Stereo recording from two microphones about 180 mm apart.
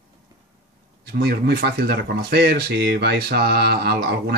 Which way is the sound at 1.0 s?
60° right (ahead or behind).